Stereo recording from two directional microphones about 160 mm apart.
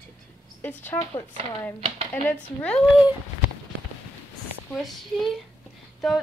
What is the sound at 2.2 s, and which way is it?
Speech, 10° left (ahead or behind).